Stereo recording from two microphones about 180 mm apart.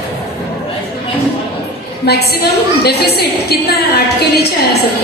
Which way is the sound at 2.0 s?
60° left (ahead or behind).